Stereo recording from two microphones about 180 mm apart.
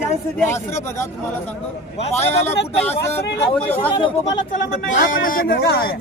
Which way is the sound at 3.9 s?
25° left (ahead or behind).